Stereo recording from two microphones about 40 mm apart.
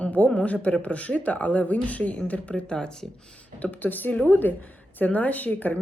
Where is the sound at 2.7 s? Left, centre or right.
Centre.